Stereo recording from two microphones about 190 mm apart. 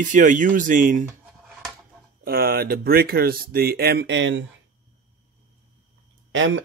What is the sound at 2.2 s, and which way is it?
Speech, 50° right (ahead or behind).